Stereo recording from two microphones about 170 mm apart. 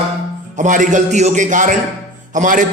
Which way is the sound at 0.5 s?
50° right (ahead or behind).